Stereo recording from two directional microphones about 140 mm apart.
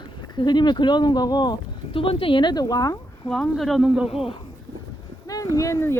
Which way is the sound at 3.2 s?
5° left (ahead or behind).